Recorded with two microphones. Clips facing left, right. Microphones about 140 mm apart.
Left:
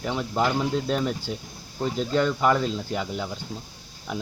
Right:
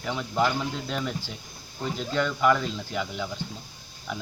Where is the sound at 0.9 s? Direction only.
40° left (ahead or behind).